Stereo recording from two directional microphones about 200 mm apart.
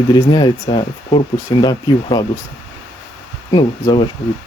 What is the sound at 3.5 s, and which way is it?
Speech, 25° left (ahead or behind).